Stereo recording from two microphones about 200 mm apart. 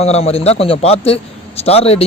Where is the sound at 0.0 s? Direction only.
30° left (ahead or behind).